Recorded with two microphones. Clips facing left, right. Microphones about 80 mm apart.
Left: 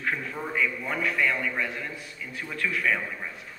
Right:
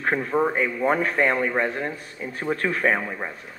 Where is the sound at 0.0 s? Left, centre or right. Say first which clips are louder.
Right 9 dB; right.